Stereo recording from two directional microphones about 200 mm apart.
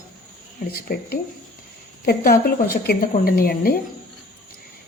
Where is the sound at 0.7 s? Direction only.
50° left (ahead or behind).